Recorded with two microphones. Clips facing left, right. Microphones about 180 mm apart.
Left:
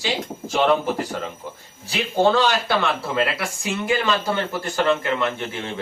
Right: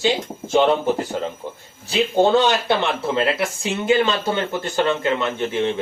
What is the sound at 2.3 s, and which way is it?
Speech, 20° right (ahead or behind).